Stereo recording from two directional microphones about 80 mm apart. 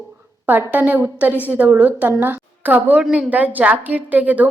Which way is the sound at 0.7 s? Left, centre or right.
Right.